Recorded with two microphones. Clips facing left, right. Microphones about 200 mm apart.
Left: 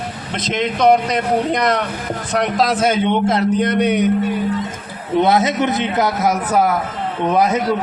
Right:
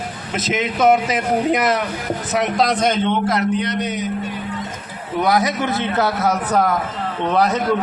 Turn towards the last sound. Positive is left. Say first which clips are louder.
# left 2 dB
turn(degrees=10)  # may be behind; listen again after turning